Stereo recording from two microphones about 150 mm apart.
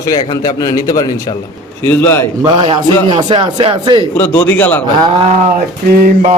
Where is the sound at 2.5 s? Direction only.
35° right (ahead or behind).